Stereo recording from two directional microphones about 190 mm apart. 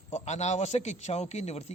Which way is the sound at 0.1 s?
35° left (ahead or behind).